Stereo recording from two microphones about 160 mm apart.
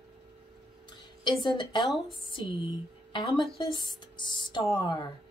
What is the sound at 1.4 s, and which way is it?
Speech, 30° left (ahead or behind).